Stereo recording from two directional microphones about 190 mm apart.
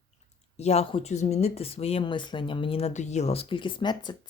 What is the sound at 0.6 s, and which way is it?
Speech, 35° left (ahead or behind).